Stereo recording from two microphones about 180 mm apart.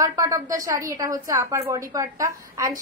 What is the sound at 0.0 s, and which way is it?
A woman's voice, 15° right (ahead or behind).